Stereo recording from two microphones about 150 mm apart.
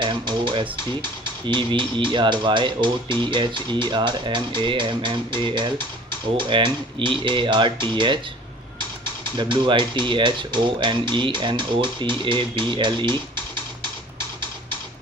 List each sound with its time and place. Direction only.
0.0 s music: 30° right (ahead or behind)
1.5 s speech: 30° right (ahead or behind)
9.4 s speech: 35° right (ahead or behind)